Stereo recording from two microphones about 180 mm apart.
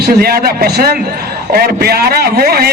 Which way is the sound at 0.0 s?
60° right (ahead or behind).